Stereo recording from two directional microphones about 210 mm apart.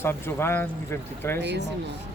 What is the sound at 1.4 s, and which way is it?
Speech, 55° right (ahead or behind).